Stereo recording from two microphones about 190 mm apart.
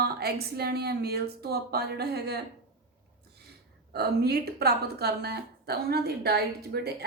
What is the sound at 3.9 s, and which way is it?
Speech, 55° right (ahead or behind).